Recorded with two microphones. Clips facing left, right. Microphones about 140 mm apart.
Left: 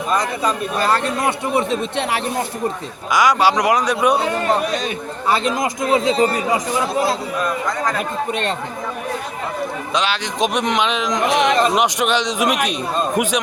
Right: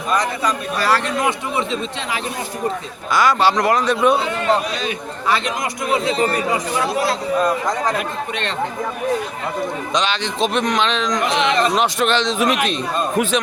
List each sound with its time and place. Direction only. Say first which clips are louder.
1.5 s speech: left 4 dB; 55° left (ahead or behind)
3.1 s speech: left 1 dB; 15° left (ahead or behind)
4.2 s speech: even; 45° left (ahead or behind)
5.5 s speech: left 3 dB; 25° left (ahead or behind)
7.3 s speech: right 3 dB; 30° right (ahead or behind)
9.9 s speech: even; 5° left (ahead or behind)